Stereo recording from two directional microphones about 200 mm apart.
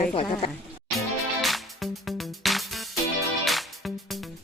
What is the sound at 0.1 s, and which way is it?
Speech, 25° left (ahead or behind).